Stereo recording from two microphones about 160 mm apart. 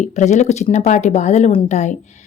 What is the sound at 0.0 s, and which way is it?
A woman's voice, 45° left (ahead or behind).